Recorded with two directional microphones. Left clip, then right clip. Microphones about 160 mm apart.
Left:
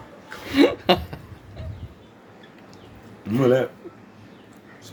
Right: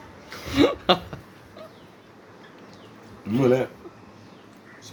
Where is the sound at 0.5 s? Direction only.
25° left (ahead or behind).